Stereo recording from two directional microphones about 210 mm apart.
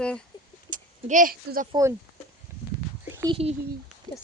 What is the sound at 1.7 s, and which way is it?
Speech, 15° right (ahead or behind).